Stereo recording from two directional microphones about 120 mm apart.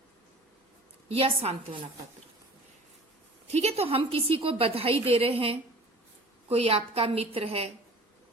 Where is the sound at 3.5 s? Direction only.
60° right (ahead or behind).